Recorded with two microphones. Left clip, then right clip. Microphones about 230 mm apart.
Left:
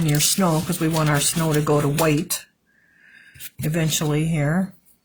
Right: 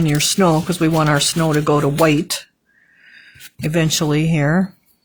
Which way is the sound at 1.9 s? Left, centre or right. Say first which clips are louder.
Right 6 dB; right.